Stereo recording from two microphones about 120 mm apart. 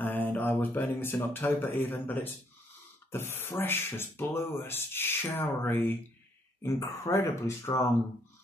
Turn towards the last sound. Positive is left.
turn(degrees=25)  # may be behind; listen again after turning